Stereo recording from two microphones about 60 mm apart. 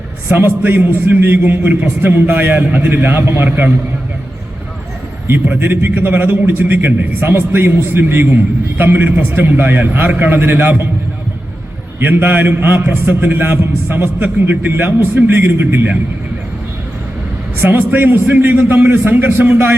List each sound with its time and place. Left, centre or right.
0.3 s a man's voice: right
5.5 s a man's voice: right
11.9 s a man's voice: right
17.6 s a man's voice: right